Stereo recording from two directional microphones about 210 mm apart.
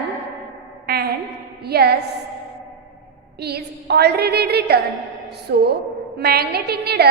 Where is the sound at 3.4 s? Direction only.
50° right (ahead or behind).